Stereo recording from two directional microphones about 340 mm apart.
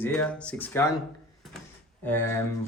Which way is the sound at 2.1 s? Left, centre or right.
Centre.